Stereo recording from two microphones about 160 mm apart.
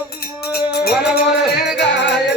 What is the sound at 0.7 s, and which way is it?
Music, 80° left.